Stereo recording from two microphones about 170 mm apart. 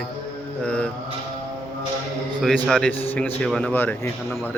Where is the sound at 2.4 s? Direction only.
5° left (ahead or behind).